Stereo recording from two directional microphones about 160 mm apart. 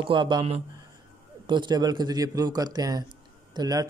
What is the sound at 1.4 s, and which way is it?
A man's voice, 30° right (ahead or behind).